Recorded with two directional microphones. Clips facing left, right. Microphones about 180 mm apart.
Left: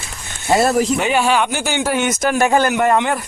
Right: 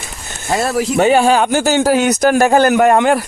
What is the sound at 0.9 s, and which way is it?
A man's voice, 40° right (ahead or behind).